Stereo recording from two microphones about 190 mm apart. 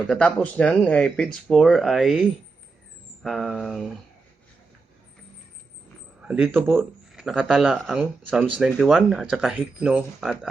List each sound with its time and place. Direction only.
0.1 s speech: 5° left (ahead or behind)
3.2 s speech: centre (ahead or behind)
6.2 s a man's voice: 5° right (ahead or behind)